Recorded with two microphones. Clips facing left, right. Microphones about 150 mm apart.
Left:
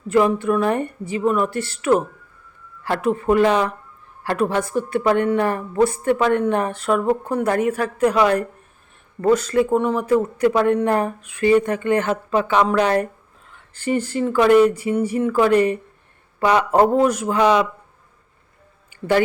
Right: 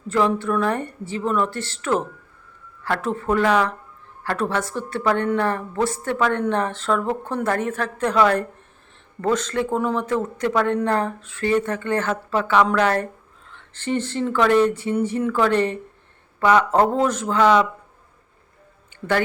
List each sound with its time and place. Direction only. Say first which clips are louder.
0.1 s speech: left 3 dB; 15° left (ahead or behind)
18.9 s speech: left 4 dB; 10° left (ahead or behind)